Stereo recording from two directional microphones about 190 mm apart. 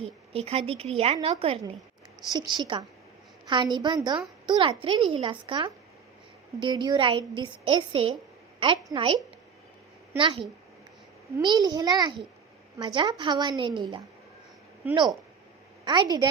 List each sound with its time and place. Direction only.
0.0 s a woman's voice: 30° right (ahead or behind)
11.4 s a woman's voice: 20° right (ahead or behind)
15.8 s a woman's voice: 25° right (ahead or behind)